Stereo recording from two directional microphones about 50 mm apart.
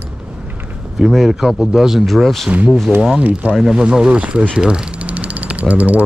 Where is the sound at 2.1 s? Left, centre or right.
Centre.